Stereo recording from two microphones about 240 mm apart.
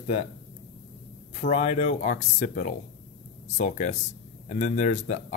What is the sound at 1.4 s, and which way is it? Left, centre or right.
A man's voice, left.